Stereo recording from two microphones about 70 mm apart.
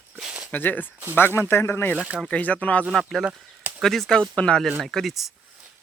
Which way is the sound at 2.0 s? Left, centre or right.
Centre.